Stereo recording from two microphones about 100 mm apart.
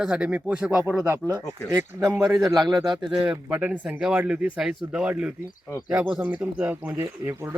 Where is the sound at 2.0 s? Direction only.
35° right (ahead or behind).